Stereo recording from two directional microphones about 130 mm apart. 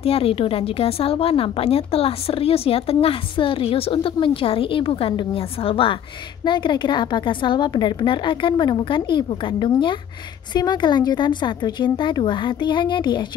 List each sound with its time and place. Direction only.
0.0 s a woman's voice: 50° left (ahead or behind)